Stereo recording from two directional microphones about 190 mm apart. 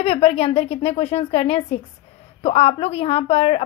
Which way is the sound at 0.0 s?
35° left (ahead or behind).